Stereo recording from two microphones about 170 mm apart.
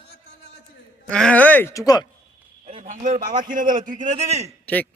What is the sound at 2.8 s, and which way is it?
A man's voice, 50° right (ahead or behind).